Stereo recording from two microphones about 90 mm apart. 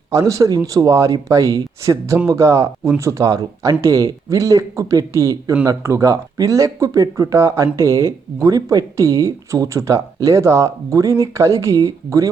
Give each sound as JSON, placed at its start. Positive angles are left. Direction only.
{"t": 0.1, "sound": "speech", "side_deg": -35}